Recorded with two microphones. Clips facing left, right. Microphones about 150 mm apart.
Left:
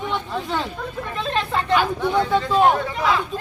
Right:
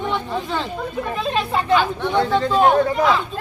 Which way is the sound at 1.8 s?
5° left (ahead or behind).